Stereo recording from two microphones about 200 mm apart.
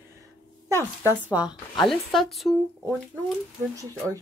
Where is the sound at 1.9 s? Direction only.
Centre (ahead or behind).